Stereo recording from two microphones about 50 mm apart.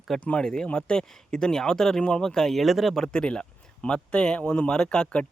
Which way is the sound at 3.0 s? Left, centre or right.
Centre.